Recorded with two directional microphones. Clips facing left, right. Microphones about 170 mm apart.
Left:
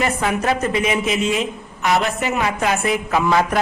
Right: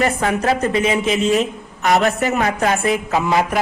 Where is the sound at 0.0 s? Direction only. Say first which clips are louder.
Right 2 dB; 35° right (ahead or behind).